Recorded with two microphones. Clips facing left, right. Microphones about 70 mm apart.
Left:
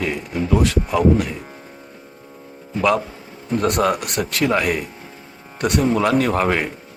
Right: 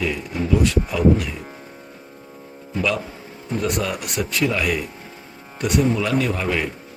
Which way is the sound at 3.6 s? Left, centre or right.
Left.